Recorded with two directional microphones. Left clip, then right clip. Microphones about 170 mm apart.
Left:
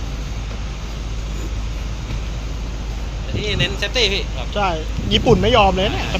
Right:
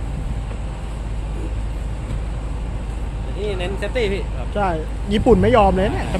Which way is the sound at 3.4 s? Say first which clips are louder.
Left 4 dB; 55° right (ahead or behind).